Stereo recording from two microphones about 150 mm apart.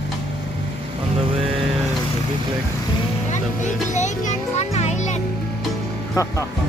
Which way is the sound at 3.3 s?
50° left (ahead or behind).